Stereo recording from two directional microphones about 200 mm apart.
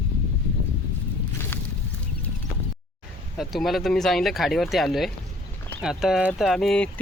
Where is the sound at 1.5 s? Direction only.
10° left (ahead or behind).